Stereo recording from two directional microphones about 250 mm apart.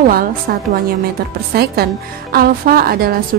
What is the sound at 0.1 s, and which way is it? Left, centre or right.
A woman's voice, right.